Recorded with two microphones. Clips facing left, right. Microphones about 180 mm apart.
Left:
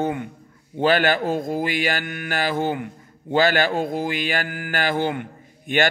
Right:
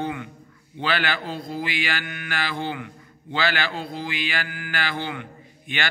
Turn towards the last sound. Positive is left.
turn(degrees=45)  # may be behind; listen again after turning